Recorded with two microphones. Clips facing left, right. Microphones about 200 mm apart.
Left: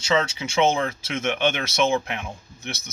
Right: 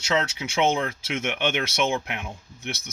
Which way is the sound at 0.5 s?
15° right (ahead or behind).